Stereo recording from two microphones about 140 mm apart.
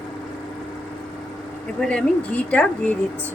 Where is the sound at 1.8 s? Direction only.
5° left (ahead or behind).